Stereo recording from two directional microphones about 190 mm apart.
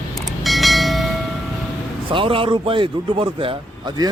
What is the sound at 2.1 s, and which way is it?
A man's voice, 25° right (ahead or behind).